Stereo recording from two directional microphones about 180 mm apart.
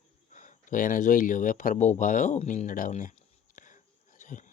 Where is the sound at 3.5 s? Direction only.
45° left (ahead or behind).